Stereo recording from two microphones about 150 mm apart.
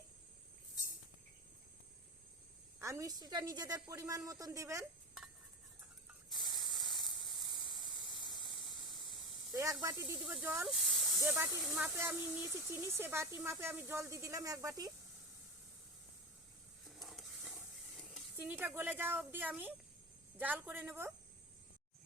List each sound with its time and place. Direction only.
2.7 s a woman's voice: 20° right (ahead or behind)
6.3 s spray: centre (ahead or behind)
9.6 s speech: 20° right (ahead or behind)
10.2 s speech: 5° right (ahead or behind)
10.7 s snake: centre (ahead or behind)
11.2 s speech: 10° right (ahead or behind)
16.8 s a sound: centre (ahead or behind)
17.4 s a sound: 10° right (ahead or behind)
17.9 s stir: centre (ahead or behind)
18.3 s speech: 10° right (ahead or behind)